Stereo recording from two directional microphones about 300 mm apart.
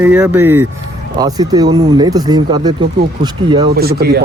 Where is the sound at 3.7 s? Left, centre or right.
Right.